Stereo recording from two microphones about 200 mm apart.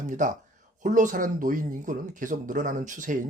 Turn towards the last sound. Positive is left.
turn(degrees=-40)  # may be behind; listen again after turning